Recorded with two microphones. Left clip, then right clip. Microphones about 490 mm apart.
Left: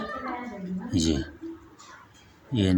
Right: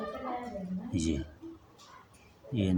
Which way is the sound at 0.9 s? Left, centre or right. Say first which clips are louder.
Left 8 dB; right.